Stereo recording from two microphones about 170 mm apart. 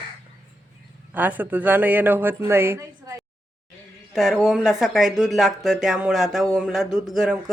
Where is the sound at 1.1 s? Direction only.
10° right (ahead or behind).